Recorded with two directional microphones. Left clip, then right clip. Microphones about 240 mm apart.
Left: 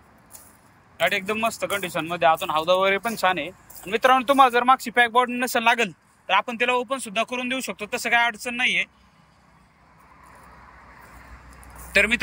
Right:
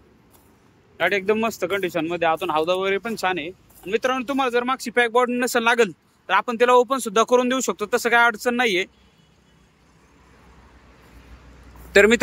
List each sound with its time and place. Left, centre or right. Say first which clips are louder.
0.9 s speech: right 3 dB; centre
11.9 s speech: right 5 dB; centre